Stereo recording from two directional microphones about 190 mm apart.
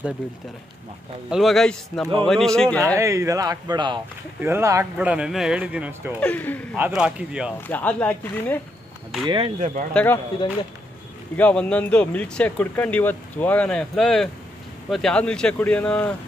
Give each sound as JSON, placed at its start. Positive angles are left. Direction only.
{"t": 1.3, "sound": "speech", "side_deg": 0}
{"t": 3.0, "sound": "speech", "side_deg": -15}
{"t": 4.4, "sound": "speech", "side_deg": -15}
{"t": 6.1, "sound": "speech", "side_deg": 10}
{"t": 6.8, "sound": "speech", "side_deg": -5}
{"t": 7.6, "sound": "speech", "side_deg": 10}
{"t": 9.2, "sound": "speech", "side_deg": -25}
{"t": 9.9, "sound": "speech", "side_deg": 10}
{"t": 11.3, "sound": "speech", "side_deg": 10}